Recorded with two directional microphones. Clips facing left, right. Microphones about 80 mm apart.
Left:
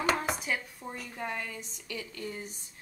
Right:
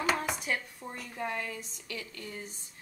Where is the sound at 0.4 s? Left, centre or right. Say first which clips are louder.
Even; centre.